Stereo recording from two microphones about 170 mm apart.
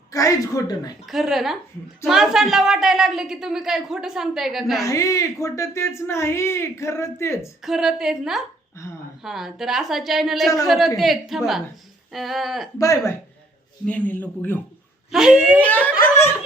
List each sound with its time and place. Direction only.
0.1 s a man's voice: 20° left (ahead or behind)
1.0 s a woman's voice: centre (ahead or behind)
4.8 s speech: 20° left (ahead or behind)
7.6 s a woman's voice: centre (ahead or behind)
12.8 s a man's voice: 20° left (ahead or behind)
13.8 s speech: 10° left (ahead or behind)
15.1 s a woman's voice: 5° right (ahead or behind)
15.5 s speech: 10° left (ahead or behind)